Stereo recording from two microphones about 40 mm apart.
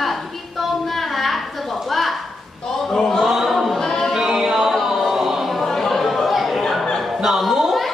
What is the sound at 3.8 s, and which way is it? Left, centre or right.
Music, centre.